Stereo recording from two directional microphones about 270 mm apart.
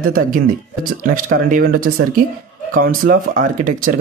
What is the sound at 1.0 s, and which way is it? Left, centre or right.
Speech, right.